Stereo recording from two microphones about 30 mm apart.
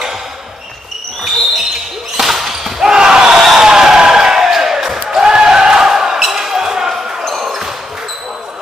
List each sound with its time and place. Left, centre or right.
2.1 s basketball bounce: centre
3.5 s a sound: centre
5.1 s basketball bounce: right
7.3 s basketball bounce: centre